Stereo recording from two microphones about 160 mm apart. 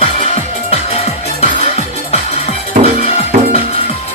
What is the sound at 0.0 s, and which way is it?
Music, 40° left (ahead or behind).